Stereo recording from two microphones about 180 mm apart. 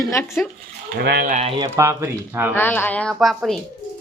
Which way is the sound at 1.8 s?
15° right (ahead or behind).